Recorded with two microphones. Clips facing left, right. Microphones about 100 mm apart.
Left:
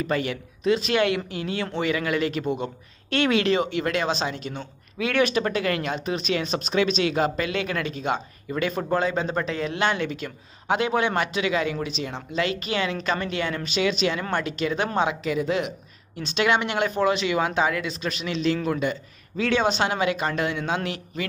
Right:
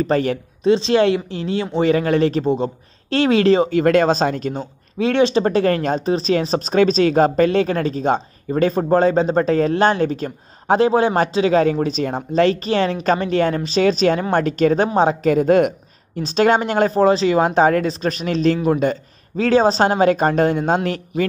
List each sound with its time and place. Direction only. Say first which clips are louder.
0.0 s speech: right 8 dB; 40° right (ahead or behind)